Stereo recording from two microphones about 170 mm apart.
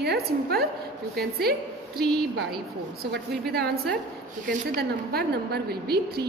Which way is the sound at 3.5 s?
65° right (ahead or behind).